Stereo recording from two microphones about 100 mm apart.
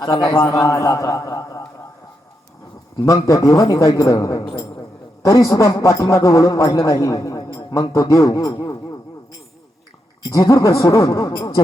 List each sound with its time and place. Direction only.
0.0 s a man's voice: 45° left (ahead or behind)
0.5 s a man's voice: 35° left (ahead or behind)
3.2 s a man's voice: 35° left (ahead or behind)
10.2 s a man's voice: 35° left (ahead or behind)
11.3 s a man's voice: 50° left (ahead or behind)